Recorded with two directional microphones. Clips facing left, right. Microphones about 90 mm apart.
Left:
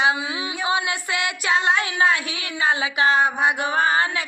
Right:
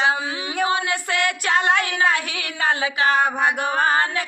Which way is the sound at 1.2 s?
55° right (ahead or behind).